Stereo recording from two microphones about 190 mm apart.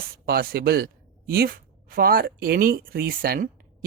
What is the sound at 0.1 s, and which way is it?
Speech, 55° right (ahead or behind).